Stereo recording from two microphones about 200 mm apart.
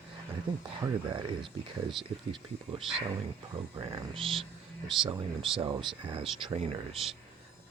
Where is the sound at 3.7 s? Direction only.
25° right (ahead or behind).